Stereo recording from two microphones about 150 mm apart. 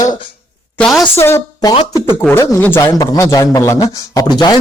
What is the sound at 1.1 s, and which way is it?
A woman's voice, 15° left (ahead or behind).